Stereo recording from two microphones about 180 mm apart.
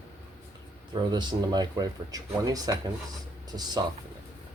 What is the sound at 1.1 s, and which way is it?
Speech, 25° right (ahead or behind).